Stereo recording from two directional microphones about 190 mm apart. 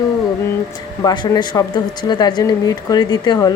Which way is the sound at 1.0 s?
20° left (ahead or behind).